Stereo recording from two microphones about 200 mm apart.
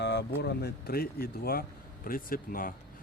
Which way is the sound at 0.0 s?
60° left (ahead or behind).